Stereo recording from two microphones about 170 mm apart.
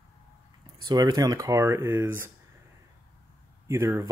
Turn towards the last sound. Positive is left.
turn(degrees=-15)  # may be behind; listen again after turning